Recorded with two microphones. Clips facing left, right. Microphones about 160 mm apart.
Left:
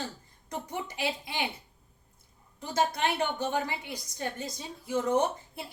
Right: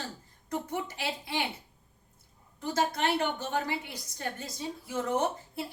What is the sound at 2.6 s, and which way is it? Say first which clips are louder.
A woman's voice: even; 15° left (ahead or behind).